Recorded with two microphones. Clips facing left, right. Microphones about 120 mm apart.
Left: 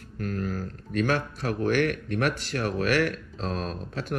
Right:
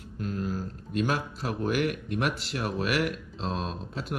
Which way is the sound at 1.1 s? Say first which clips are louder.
Left 3 dB; 15° right (ahead or behind).